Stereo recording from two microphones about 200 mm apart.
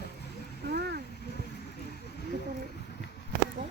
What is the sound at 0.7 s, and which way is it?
Vehicle, 55° right (ahead or behind).